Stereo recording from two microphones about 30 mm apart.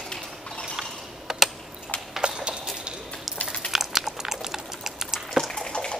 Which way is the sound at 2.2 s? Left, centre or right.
Right.